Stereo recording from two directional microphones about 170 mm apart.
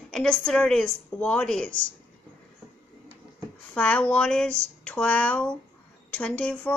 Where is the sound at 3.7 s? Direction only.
5° left (ahead or behind).